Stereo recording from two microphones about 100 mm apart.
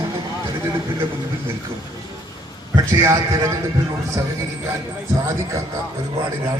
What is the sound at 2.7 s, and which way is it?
Speech, 40° right (ahead or behind).